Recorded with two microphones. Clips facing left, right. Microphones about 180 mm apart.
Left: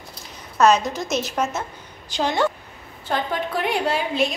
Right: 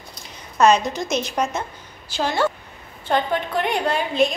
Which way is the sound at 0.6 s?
Centre (ahead or behind).